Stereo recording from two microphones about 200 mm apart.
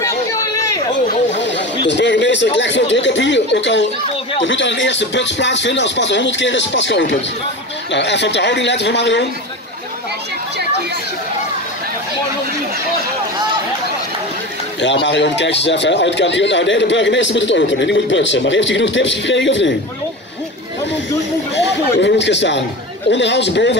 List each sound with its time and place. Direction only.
0.0 s chatter: 15° left (ahead or behind)
1.3 s chatter: 60° left (ahead or behind)
1.9 s speech: 60° left (ahead or behind)
14.8 s speech: 60° left (ahead or behind)
22.0 s speech: 60° left (ahead or behind)